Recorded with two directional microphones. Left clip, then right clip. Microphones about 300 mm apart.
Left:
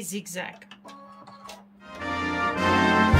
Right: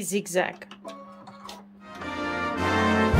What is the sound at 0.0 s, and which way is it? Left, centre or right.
Speech, centre.